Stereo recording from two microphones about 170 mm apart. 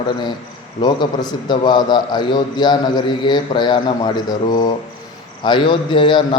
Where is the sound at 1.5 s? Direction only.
25° left (ahead or behind).